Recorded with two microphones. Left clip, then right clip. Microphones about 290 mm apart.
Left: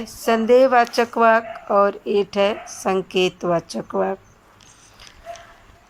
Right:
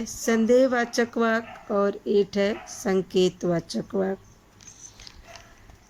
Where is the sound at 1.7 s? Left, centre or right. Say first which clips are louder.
Left 6 dB; left.